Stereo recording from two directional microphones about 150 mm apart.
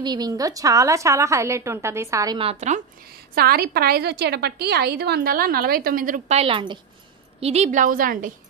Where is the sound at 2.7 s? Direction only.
85° right; by 6.8 s 35° right (ahead or behind).